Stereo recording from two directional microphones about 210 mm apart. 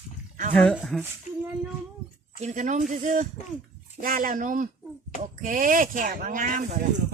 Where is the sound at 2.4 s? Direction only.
35° right (ahead or behind).